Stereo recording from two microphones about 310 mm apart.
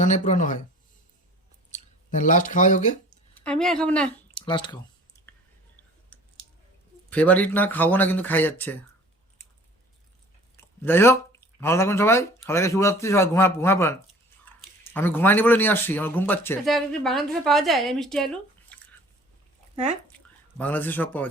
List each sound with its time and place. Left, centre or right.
0.0 s speech: left
1.7 s speech: left
3.3 s speech: centre
4.4 s speech: centre
7.1 s speech: centre
10.6 s speech: centre
19.7 s speech: right
20.1 s a sound: centre